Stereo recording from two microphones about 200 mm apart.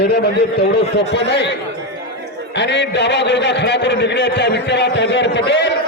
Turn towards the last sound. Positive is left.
turn(degrees=60)  # may be behind; listen again after turning